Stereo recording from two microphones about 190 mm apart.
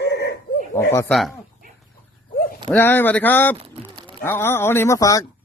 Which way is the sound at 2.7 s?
10° left (ahead or behind).